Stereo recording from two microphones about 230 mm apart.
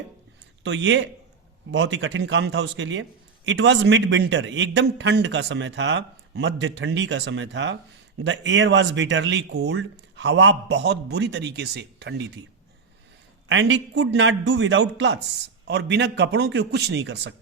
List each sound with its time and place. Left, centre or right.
0.6 s a man's voice: right
13.5 s a man's voice: right